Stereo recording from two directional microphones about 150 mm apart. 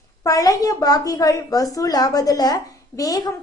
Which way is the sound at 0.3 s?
25° left (ahead or behind).